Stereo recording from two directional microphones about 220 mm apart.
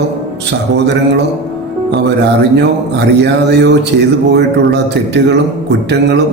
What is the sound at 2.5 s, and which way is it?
A man's voice, 50° right (ahead or behind).